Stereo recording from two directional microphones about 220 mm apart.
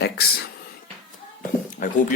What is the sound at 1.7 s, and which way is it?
Speech, 35° left (ahead or behind).